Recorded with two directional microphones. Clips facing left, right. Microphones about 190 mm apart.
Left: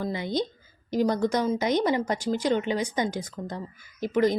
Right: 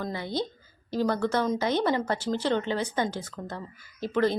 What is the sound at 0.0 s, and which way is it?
A woman's voice, 20° left (ahead or behind).